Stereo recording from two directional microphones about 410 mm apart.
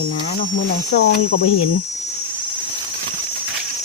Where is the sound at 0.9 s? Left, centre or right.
Left.